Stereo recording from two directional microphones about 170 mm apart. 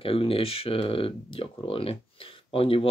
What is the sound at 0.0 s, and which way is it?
Speech, 35° left (ahead or behind).